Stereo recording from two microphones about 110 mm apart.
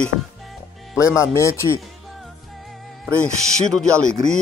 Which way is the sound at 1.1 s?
25° left (ahead or behind).